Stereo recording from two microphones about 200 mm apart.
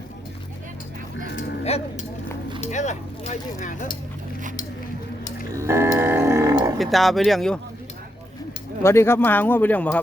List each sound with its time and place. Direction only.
1.4 s sheep: 35° left (ahead or behind)
2.6 s speech: 35° left (ahead or behind)
5.5 s livestock: 15° right (ahead or behind)
6.7 s speech: centre (ahead or behind)
8.8 s speech: 15° left (ahead or behind)